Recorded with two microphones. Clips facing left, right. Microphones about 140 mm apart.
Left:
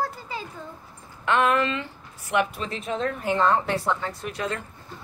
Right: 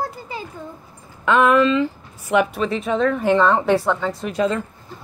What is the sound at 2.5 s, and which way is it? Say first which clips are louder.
A woman's voice: right 8 dB; 75° right (ahead or behind).